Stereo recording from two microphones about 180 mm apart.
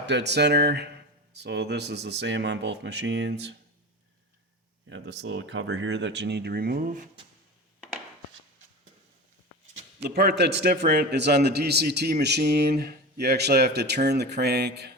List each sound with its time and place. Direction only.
0.0 s speech: 75° right (ahead or behind)
4.9 s speech: 75° right (ahead or behind); by 7.1 s 45° right (ahead or behind)
10.0 s a man's voice: 65° right (ahead or behind)